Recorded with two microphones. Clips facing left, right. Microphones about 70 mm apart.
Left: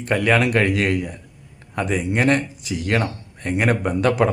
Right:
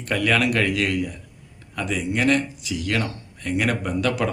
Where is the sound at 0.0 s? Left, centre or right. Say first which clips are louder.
Left 3 dB; left.